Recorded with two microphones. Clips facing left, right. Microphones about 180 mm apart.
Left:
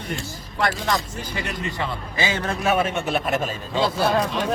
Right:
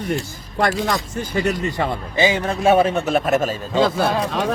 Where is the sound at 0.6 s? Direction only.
45° right (ahead or behind).